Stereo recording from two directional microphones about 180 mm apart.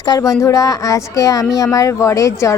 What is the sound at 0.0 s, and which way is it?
Speech, 20° left (ahead or behind).